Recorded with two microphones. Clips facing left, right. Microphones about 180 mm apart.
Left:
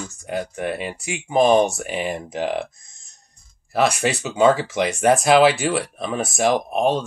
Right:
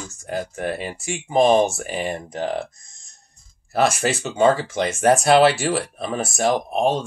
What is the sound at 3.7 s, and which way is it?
Speech, centre (ahead or behind).